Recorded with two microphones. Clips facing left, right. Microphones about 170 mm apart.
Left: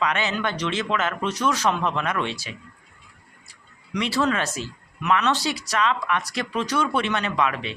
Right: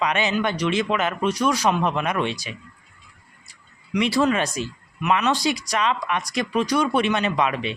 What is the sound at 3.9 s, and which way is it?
Speech, 15° right (ahead or behind).